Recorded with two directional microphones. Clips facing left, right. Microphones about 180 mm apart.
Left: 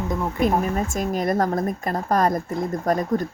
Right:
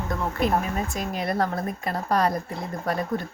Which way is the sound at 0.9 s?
45° left (ahead or behind).